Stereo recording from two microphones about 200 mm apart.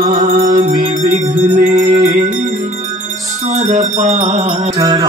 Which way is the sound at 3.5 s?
35° right (ahead or behind).